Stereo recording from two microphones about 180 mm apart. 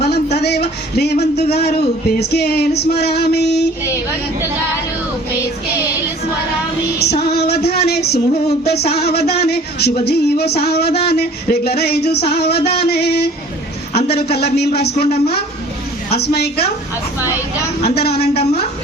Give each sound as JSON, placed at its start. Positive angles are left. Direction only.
{"t": 0.0, "sound": "speech", "side_deg": 65}
{"t": 7.3, "sound": "speech", "side_deg": 65}
{"t": 16.0, "sound": "speech", "side_deg": 65}
{"t": 17.8, "sound": "speech", "side_deg": 60}